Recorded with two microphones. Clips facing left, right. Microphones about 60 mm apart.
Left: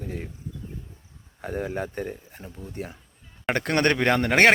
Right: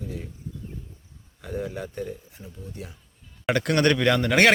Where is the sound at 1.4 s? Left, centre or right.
Left.